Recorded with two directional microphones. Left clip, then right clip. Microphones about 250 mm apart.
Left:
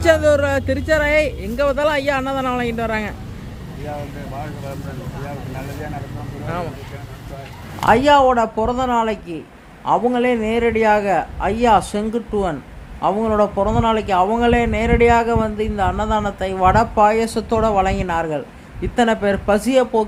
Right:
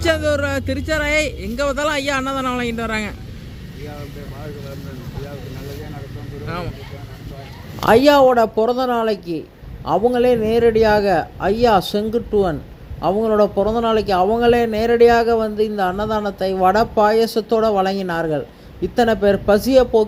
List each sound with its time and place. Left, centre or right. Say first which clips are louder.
0.0 s a man's voice: left 4 dB; centre
7.9 s a man's voice: right 1 dB; centre